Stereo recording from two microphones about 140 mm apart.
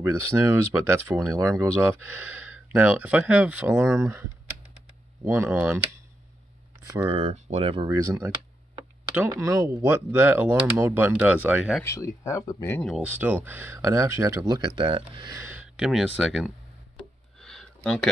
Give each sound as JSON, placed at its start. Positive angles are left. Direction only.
{"t": 0.0, "sound": "speech", "side_deg": -20}
{"t": 1.3, "sound": "speech", "side_deg": -25}
{"t": 7.1, "sound": "speech", "side_deg": -45}
{"t": 7.9, "sound": "speech", "side_deg": -25}
{"t": 9.3, "sound": "speech", "side_deg": -25}
{"t": 11.8, "sound": "speech", "side_deg": 20}
{"t": 12.8, "sound": "speech", "side_deg": 0}
{"t": 13.1, "sound": "speech", "side_deg": -10}
{"t": 14.7, "sound": "speech", "side_deg": -40}
{"t": 15.3, "sound": "speech", "side_deg": -15}
{"t": 17.4, "sound": "a sound", "side_deg": 0}